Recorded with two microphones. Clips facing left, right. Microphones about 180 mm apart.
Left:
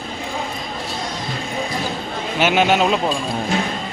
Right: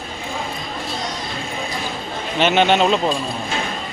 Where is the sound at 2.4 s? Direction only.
10° left (ahead or behind).